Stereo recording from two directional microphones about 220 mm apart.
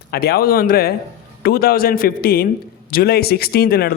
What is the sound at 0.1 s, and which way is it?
A man's voice, 45° left (ahead or behind).